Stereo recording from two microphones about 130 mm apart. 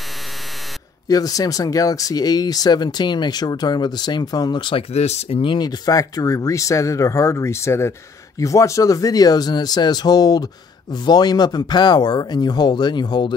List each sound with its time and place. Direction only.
1.0 s speech: 30° left (ahead or behind)
4.9 s speech: 55° left (ahead or behind); by 13.3 s 35° left (ahead or behind)